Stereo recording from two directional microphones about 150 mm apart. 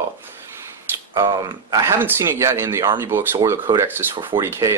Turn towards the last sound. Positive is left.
turn(degrees=-55)  # may be behind; listen again after turning